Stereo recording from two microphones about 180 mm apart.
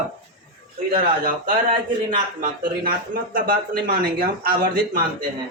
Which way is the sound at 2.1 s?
50° right (ahead or behind).